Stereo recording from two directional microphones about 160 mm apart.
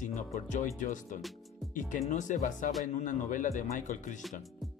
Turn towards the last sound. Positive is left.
turn(degrees=50)  # may be behind; listen again after turning